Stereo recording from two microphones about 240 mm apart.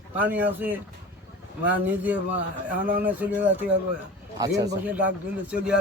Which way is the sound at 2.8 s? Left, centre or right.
Right.